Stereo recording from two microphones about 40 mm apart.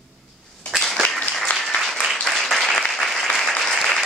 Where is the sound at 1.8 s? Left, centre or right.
Centre.